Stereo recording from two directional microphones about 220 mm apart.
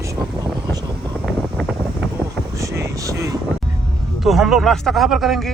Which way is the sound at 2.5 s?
15° right (ahead or behind).